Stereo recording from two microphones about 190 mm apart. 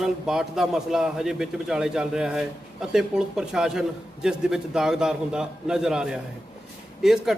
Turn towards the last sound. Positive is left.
turn(degrees=0)  # may be behind; listen again after turning